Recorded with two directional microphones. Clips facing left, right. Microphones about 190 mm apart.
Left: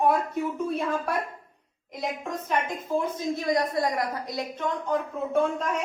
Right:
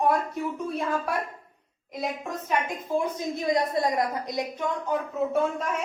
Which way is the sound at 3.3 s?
20° right (ahead or behind).